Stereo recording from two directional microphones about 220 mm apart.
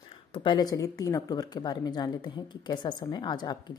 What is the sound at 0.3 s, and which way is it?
A woman's voice, 20° left (ahead or behind).